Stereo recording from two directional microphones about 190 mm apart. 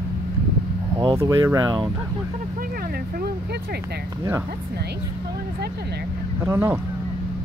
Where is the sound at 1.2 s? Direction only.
15° right (ahead or behind).